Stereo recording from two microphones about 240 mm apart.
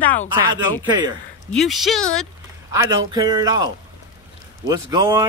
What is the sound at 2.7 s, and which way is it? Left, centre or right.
Speech, centre.